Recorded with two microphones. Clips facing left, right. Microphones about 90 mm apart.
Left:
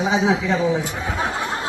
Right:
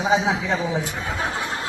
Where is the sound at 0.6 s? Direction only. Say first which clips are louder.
Left 4 dB; 15° left (ahead or behind).